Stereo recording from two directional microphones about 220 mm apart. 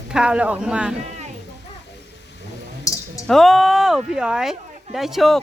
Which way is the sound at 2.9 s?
15° left (ahead or behind).